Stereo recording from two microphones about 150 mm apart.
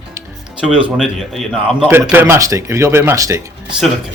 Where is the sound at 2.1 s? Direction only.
15° right (ahead or behind).